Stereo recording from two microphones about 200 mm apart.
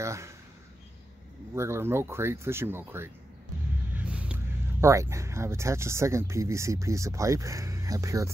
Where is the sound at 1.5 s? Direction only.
15° right (ahead or behind).